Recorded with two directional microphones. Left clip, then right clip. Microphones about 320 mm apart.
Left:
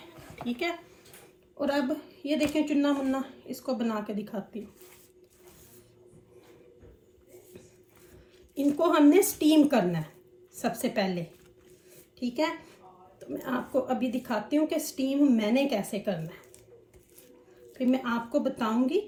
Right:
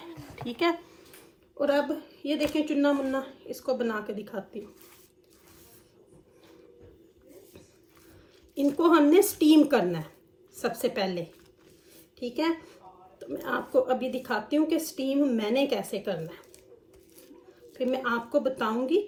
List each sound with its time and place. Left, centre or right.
0.3 s speech: centre
1.5 s a woman's voice: centre
8.5 s a woman's voice: centre
12.2 s a woman's voice: centre
17.7 s a woman's voice: centre